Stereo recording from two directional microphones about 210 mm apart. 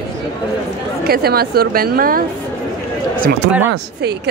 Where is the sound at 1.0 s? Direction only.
45° right (ahead or behind).